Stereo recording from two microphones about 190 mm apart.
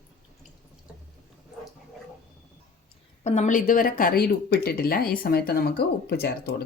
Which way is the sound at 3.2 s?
35° left (ahead or behind).